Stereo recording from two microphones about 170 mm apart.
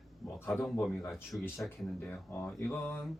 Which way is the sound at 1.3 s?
15° left (ahead or behind).